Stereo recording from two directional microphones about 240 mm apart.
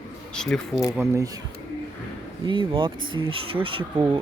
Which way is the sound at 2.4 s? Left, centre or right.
Right.